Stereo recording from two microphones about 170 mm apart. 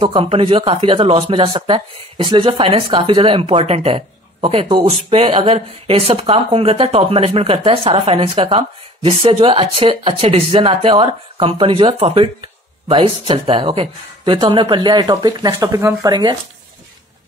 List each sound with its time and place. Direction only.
0.0 s speech: 35° right (ahead or behind)